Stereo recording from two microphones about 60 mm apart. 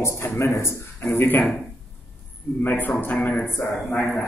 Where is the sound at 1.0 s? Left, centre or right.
Left.